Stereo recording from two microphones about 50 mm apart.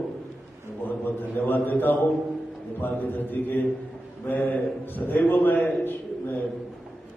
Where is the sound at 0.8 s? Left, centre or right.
Left.